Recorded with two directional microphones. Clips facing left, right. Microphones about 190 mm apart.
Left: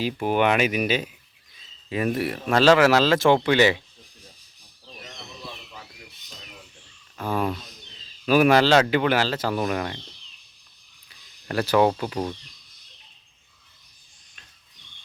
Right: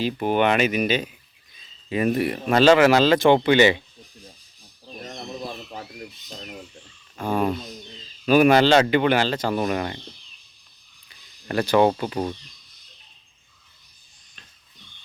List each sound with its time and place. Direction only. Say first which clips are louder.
0.0 s speech: right 1 dB; 5° left (ahead or behind)
4.9 s bird: right 9 dB; 45° right (ahead or behind)
7.2 s speech: right 3 dB; centre (ahead or behind)
11.4 s speech: right 2 dB; 5° left (ahead or behind)